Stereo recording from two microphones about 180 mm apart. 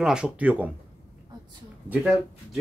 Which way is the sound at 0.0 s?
5° right (ahead or behind).